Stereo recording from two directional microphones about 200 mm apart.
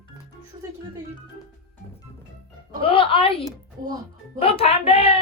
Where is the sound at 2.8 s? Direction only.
25° left (ahead or behind).